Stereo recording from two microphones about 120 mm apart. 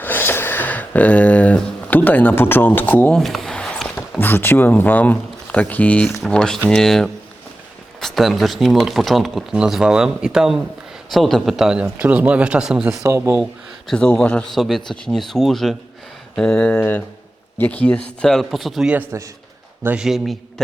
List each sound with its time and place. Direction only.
0.0 s speech: 15° left (ahead or behind)
3.2 s a man's voice: centre (ahead or behind)
13.0 s speech: 25° right (ahead or behind)
13.4 s speech: 5° left (ahead or behind)
18.3 s speech: centre (ahead or behind)
19.8 s a man's voice: 15° right (ahead or behind)
20.1 s speech: centre (ahead or behind)